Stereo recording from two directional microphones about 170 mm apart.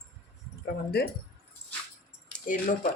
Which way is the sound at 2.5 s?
50° left (ahead or behind).